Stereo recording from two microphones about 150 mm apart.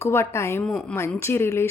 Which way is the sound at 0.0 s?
15° left (ahead or behind).